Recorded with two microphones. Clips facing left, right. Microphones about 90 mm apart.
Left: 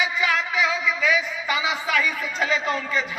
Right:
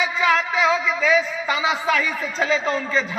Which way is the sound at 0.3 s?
35° right (ahead or behind).